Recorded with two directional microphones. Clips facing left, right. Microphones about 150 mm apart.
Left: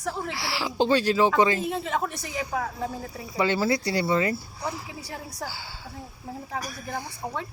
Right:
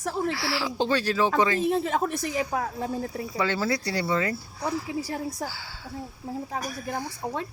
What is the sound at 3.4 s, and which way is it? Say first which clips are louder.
Speech: left 3 dB; 15° left (ahead or behind).